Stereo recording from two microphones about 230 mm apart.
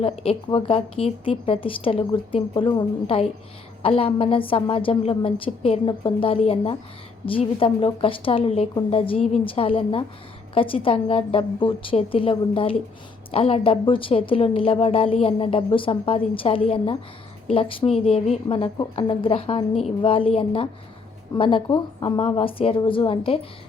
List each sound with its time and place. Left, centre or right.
0.0 s speech: left